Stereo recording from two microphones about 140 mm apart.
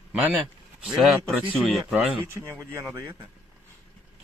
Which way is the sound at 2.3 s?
20° right (ahead or behind).